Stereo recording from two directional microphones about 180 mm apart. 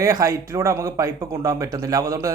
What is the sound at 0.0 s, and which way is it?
Speech, 20° right (ahead or behind).